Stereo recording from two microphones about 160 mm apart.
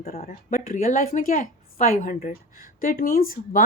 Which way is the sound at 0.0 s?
45° left (ahead or behind).